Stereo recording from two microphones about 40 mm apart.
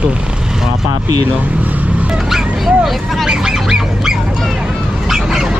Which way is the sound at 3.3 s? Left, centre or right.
Centre.